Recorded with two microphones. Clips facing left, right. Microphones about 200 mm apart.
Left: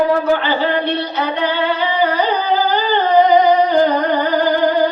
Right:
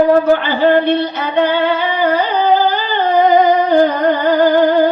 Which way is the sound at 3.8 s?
50° right (ahead or behind).